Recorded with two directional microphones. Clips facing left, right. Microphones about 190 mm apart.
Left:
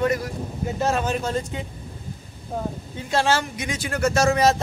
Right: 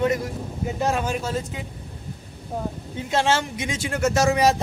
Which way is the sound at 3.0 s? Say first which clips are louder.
Even; 20° right (ahead or behind).